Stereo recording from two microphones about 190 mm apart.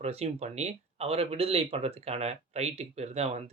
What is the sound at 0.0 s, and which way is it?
Speech, 35° right (ahead or behind).